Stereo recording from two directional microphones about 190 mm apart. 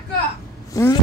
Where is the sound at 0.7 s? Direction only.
20° left (ahead or behind).